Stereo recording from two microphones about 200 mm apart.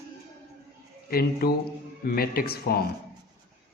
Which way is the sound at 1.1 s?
50° left (ahead or behind).